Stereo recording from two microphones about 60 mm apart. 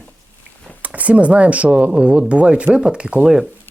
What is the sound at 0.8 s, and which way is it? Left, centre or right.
Speech, right.